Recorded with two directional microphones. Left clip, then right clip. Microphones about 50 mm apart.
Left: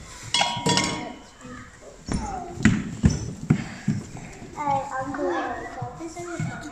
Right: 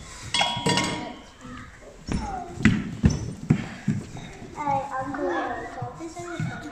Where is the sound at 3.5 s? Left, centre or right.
Left.